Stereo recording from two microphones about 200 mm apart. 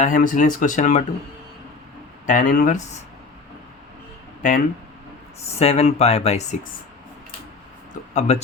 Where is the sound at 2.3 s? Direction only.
40° left (ahead or behind).